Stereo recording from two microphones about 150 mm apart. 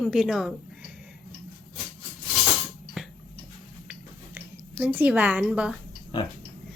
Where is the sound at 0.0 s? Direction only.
5° right (ahead or behind).